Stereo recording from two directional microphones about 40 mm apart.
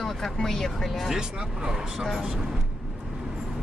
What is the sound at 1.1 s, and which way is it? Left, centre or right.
Speech, centre.